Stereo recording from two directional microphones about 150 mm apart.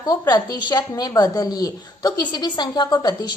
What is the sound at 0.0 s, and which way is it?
A woman's voice, 25° left (ahead or behind).